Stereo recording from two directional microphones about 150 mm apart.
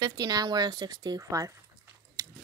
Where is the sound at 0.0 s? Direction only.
25° right (ahead or behind).